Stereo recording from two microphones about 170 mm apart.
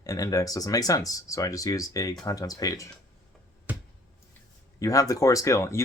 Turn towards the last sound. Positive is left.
turn(degrees=15)  # may be behind; listen again after turning